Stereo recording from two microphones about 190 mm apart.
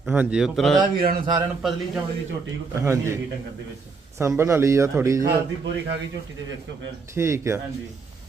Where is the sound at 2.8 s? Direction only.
15° right (ahead or behind).